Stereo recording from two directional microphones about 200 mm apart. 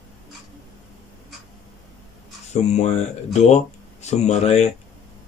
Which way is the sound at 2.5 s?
35° left (ahead or behind).